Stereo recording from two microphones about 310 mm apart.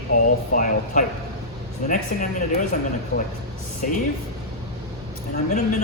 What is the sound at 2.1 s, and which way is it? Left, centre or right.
Speech, left.